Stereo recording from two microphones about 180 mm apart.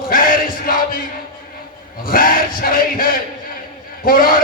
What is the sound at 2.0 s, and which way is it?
Speech, 50° left (ahead or behind).